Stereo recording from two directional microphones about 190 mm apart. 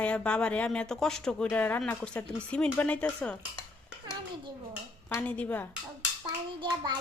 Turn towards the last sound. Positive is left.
turn(degrees=-25)  # may be behind; listen again after turning